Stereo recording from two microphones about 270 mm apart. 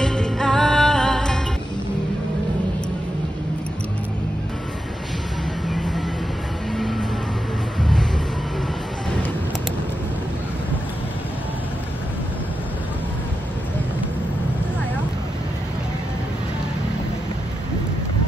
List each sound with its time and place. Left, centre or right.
0.0 s music: centre
6.8 s vehicle: centre